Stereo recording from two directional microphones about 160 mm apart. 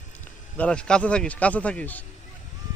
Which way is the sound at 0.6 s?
5° left (ahead or behind).